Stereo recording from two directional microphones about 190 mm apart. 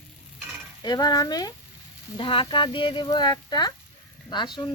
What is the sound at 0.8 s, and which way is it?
Speech, 20° left (ahead or behind).